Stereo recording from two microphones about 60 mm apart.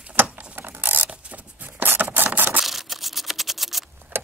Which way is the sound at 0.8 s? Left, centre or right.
Right.